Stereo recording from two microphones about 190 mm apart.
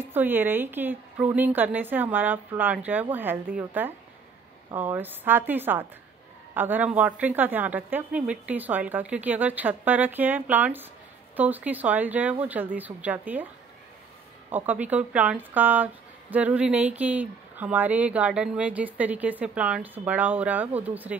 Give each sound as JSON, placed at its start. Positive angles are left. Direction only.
{"t": 0.0, "sound": "a woman's voice", "side_deg": -10}
{"t": 14.5, "sound": "a woman's voice", "side_deg": -10}